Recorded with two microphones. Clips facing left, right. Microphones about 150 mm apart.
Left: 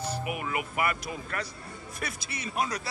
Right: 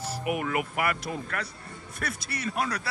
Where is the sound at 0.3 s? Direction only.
50° right (ahead or behind).